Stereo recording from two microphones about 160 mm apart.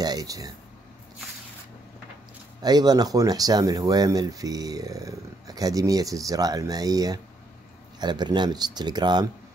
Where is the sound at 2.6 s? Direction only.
25° right (ahead or behind).